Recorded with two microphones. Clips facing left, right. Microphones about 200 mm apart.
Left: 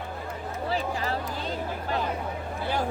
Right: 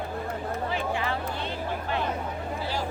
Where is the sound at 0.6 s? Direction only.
35° left (ahead or behind).